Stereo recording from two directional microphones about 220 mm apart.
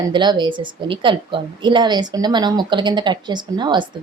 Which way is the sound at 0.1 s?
20° right (ahead or behind).